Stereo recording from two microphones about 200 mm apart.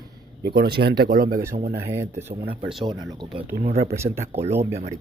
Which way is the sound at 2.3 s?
30° right (ahead or behind).